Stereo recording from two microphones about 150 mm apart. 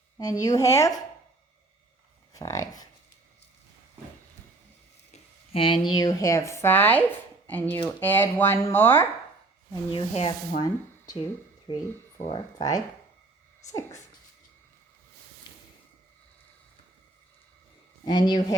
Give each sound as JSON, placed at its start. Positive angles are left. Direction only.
{"t": 0.2, "sound": "speech", "side_deg": 25}
{"t": 2.3, "sound": "speech", "side_deg": 20}
{"t": 5.1, "sound": "speech", "side_deg": 40}
{"t": 9.9, "sound": "rub", "side_deg": 40}
{"t": 10.6, "sound": "speech", "side_deg": 25}
{"t": 11.7, "sound": "speech", "side_deg": 40}
{"t": 12.3, "sound": "speech", "side_deg": 30}
{"t": 18.0, "sound": "speech", "side_deg": 30}